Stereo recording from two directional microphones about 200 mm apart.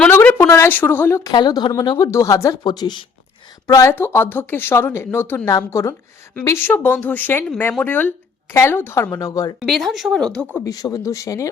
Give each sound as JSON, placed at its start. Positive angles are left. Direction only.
{"t": 0.0, "sound": "speech", "side_deg": 10}
{"t": 9.6, "sound": "speech", "side_deg": 0}
{"t": 10.5, "sound": "speech", "side_deg": 15}